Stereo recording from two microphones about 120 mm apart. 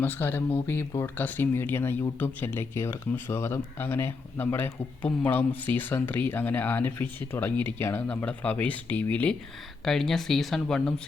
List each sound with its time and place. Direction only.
0.0 s speech: 15° left (ahead or behind)
9.8 s speech: 5° left (ahead or behind)